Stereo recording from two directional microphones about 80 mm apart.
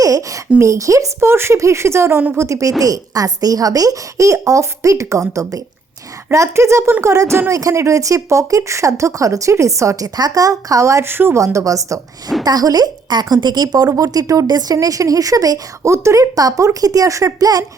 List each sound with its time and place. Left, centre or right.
0.0 s a sound: right
0.6 s a woman's voice: right
10.2 s speech: right
11.3 s a woman's voice: right